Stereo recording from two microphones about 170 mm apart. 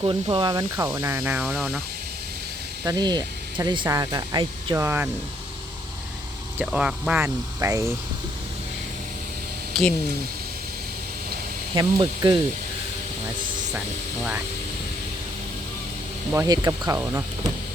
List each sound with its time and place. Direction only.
0.0 s speech: 30° right (ahead or behind); by 1.8 s centre (ahead or behind)
2.8 s speech: 25° right (ahead or behind)
6.6 s speech: 5° right (ahead or behind)
9.7 s speech: centre (ahead or behind)
11.7 s speech: 25° right (ahead or behind)
16.3 s speech: 15° right (ahead or behind)